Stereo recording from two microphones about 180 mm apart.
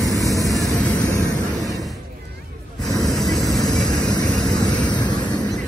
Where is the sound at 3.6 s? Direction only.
20° left (ahead or behind).